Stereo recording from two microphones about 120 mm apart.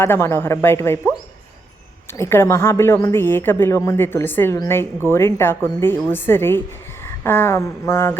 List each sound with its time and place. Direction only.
0.0 s a woman's voice: 20° left (ahead or behind)
2.1 s a woman's voice: 20° left (ahead or behind)
7.0 s a sound: 20° left (ahead or behind)